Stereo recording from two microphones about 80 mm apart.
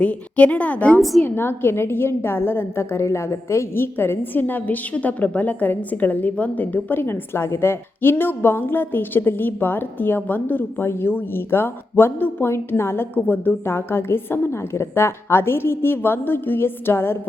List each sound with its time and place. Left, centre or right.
0.0 s a woman's voice: centre
1.2 s a woman's voice: left